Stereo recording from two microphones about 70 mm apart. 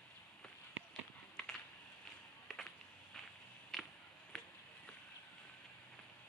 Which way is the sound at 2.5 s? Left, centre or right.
Centre.